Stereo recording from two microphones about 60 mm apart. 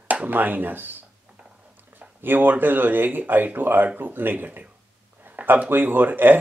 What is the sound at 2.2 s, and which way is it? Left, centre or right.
Speech, right.